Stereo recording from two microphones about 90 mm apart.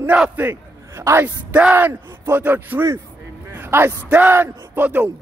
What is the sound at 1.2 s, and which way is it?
Speech, 15° right (ahead or behind).